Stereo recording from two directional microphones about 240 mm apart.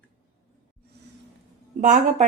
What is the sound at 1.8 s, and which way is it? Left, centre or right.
Speech, right.